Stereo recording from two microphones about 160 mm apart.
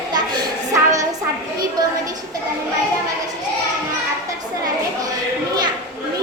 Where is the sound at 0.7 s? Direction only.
20° right (ahead or behind).